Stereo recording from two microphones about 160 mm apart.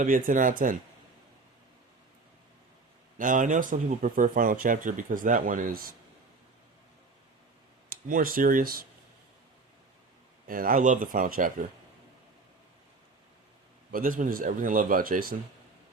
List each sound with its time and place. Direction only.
0.0 s speech: 60° right (ahead or behind)
3.2 s speech: 55° right (ahead or behind)
7.9 s speech: 60° right (ahead or behind)
10.4 s speech: 65° right (ahead or behind)
13.9 s speech: 60° right (ahead or behind)